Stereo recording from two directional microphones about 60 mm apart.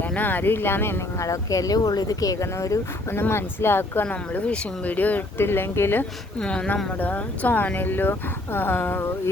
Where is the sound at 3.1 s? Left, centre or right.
Left.